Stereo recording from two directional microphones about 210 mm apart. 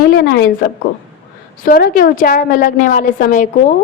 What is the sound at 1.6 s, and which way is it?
A woman's voice, 40° left (ahead or behind).